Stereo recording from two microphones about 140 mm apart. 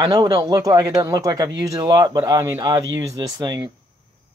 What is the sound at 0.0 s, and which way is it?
Speech, 30° right (ahead or behind).